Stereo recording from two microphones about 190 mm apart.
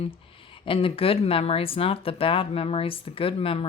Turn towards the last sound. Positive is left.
turn(degrees=30)  # may be behind; listen again after turning